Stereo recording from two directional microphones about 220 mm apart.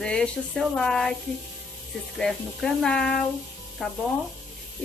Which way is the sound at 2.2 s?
5° left (ahead or behind).